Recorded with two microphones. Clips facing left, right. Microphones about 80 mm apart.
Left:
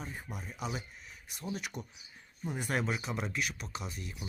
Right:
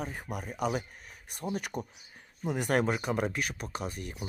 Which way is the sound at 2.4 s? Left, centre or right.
Right.